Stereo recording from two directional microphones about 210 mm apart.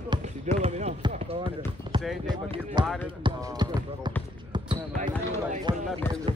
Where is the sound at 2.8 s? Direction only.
Centre (ahead or behind).